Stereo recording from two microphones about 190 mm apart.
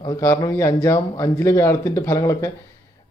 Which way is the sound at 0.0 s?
20° left (ahead or behind).